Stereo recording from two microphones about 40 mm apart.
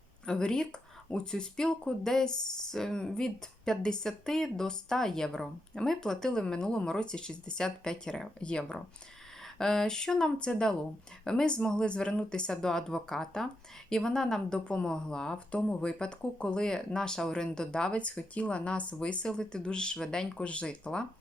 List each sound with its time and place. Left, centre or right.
0.3 s speech: centre
9.6 s speech: centre
17.9 s speech: left; by 20.4 s centre
20.4 s speech: left